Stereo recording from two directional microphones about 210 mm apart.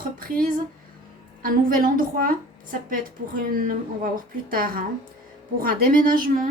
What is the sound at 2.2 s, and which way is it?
Speech, 40° right (ahead or behind).